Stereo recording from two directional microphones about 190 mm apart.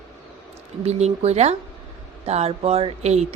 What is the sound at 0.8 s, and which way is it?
Speech, 35° right (ahead or behind).